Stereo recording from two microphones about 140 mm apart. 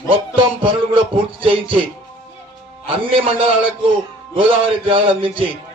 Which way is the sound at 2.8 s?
40° right (ahead or behind).